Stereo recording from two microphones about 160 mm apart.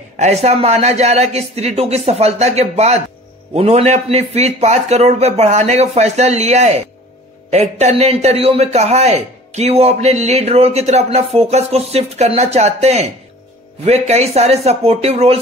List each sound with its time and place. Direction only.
0.2 s a man's voice: 45° right (ahead or behind)